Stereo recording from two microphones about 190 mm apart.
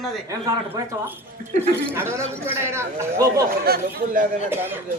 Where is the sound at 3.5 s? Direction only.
55° right (ahead or behind).